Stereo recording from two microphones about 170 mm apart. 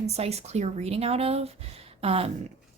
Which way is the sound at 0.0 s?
40° right (ahead or behind).